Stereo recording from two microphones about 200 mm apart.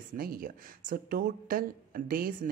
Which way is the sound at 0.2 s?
45° right (ahead or behind).